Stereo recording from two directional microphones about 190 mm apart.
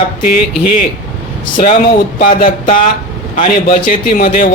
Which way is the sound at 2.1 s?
45° left (ahead or behind).